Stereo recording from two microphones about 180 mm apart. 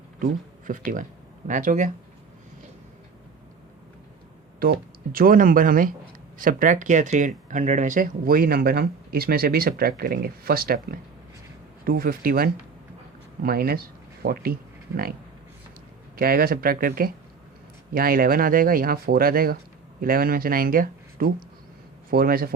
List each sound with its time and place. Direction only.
0.7 s speech: 50° right (ahead or behind)
4.6 s speech: 55° right (ahead or behind)
11.9 s speech: 55° right (ahead or behind)
16.1 s speech: 55° right (ahead or behind)